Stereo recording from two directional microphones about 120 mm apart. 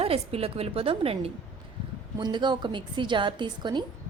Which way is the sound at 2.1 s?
40° right (ahead or behind).